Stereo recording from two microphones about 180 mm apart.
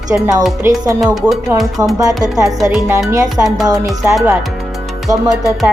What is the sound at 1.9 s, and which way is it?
Speech, 20° right (ahead or behind).